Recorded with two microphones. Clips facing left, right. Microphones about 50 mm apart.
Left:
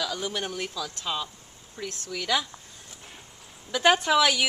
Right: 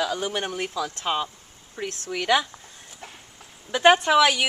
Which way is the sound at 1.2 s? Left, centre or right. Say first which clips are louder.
Right 4 dB; right.